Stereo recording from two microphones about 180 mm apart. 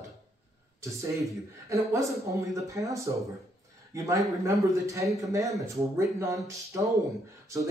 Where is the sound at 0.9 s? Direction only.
15° right (ahead or behind).